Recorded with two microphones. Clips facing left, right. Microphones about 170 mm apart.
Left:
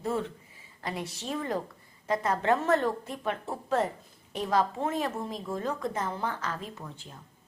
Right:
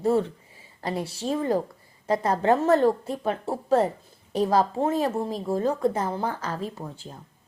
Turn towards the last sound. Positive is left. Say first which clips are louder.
# right 6 dB
turn(degrees=-35)  # may be behind; listen again after turning